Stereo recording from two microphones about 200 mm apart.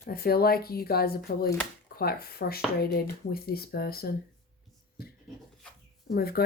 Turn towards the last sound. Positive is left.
turn(degrees=50)  # may be behind; listen again after turning